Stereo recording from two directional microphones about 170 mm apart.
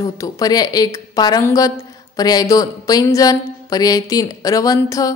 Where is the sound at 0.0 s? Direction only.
20° left (ahead or behind).